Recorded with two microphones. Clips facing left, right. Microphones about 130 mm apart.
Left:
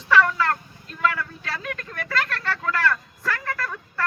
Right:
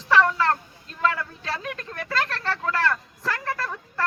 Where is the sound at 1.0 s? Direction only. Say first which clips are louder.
Even; 30° right (ahead or behind).